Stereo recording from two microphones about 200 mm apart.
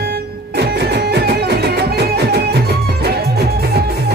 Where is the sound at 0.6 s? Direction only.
55° right (ahead or behind).